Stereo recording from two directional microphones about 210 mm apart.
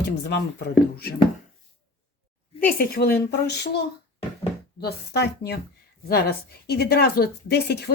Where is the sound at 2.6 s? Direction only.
45° left (ahead or behind).